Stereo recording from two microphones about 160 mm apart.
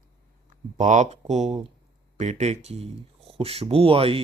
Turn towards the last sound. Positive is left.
turn(degrees=-35)  # may be behind; listen again after turning